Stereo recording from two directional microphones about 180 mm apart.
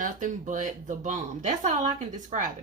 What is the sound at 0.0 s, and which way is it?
Speech, 45° right (ahead or behind).